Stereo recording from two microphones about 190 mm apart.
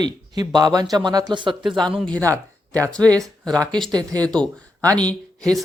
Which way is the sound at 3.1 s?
20° right (ahead or behind).